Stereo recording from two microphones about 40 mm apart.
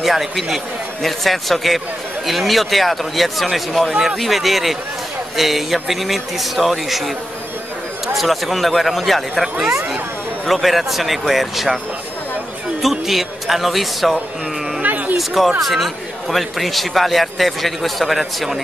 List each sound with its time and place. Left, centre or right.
0.0 s a man's voice: centre
8.1 s a man's voice: centre
12.9 s a man's voice: centre
14.8 s a sound: right
15.1 s a man's voice: centre